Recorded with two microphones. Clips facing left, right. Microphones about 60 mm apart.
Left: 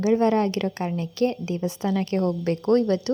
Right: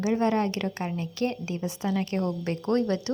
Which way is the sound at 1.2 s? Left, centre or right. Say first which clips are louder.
Left 6 dB; right.